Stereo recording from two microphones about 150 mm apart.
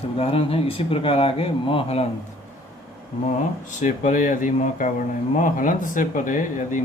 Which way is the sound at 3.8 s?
55° left (ahead or behind).